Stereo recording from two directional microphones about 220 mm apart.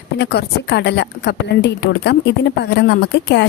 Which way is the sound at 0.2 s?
50° left (ahead or behind).